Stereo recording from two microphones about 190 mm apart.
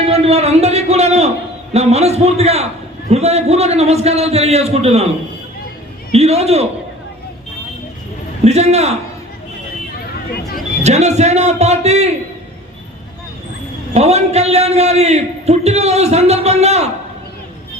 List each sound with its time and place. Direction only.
0.0 s a man's voice: 30° right (ahead or behind)
6.1 s a man's voice: 35° right (ahead or behind)
8.4 s a man's voice: 35° right (ahead or behind)
10.8 s a man's voice: 35° right (ahead or behind)
13.9 s a man's voice: 35° right (ahead or behind)